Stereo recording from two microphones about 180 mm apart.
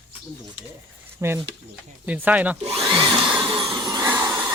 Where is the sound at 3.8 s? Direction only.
20° right (ahead or behind).